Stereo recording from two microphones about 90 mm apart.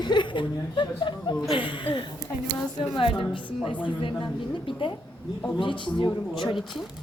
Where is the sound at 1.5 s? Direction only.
75° left (ahead or behind).